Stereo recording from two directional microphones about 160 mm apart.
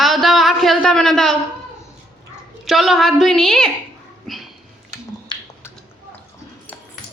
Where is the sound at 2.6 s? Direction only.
Centre (ahead or behind).